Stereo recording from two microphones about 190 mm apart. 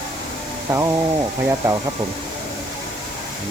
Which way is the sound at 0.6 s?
15° right (ahead or behind).